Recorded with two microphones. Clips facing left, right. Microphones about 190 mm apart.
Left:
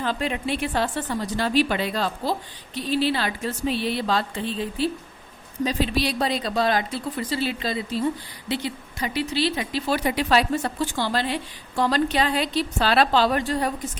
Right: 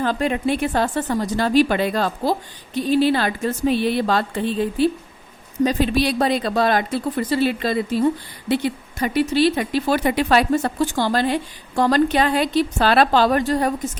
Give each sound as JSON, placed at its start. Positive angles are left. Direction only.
{"t": 0.0, "sound": "a woman's voice", "side_deg": -50}